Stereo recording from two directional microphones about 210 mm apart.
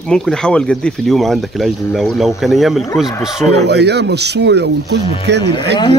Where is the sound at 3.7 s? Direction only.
50° right (ahead or behind).